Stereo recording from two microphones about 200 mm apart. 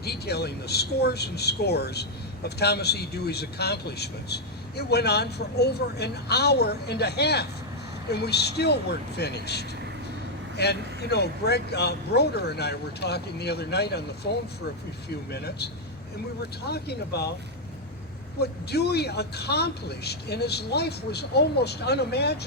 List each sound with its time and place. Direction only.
0.0 s speech: 55° left (ahead or behind)
18.3 s speech: 55° left (ahead or behind)